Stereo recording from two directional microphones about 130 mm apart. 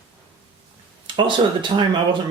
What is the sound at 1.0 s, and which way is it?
Speech, 35° right (ahead or behind).